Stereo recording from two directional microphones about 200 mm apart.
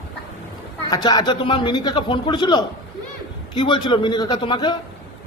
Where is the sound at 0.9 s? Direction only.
20° left (ahead or behind).